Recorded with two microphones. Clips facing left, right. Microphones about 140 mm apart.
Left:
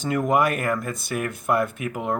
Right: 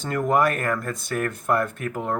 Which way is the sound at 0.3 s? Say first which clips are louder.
Right 1 dB; 10° left (ahead or behind).